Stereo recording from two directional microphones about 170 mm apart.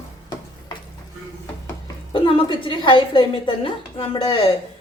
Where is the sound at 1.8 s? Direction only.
30° left (ahead or behind).